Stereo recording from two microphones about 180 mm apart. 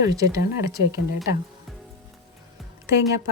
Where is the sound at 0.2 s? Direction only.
20° right (ahead or behind).